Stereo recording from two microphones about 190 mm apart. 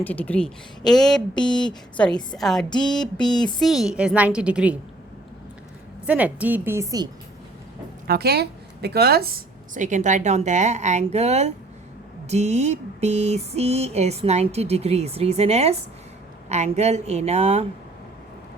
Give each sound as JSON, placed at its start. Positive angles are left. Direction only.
{"t": 0.0, "sound": "speech", "side_deg": 10}
{"t": 1.4, "sound": "speech", "side_deg": 25}
{"t": 2.3, "sound": "speech", "side_deg": 0}
{"t": 2.6, "sound": "speech", "side_deg": 25}
{"t": 2.9, "sound": "speech", "side_deg": 5}
{"t": 3.2, "sound": "speech", "side_deg": 20}
{"t": 3.6, "sound": "speech", "side_deg": 0}
{"t": 6.1, "sound": "a woman's voice", "side_deg": -10}
{"t": 8.0, "sound": "a woman's voice", "side_deg": -55}